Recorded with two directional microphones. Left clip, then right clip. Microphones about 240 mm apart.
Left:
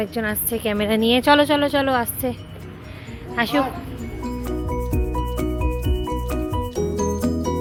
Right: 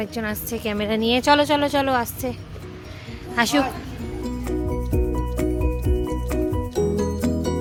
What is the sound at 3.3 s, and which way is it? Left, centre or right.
Speech, right.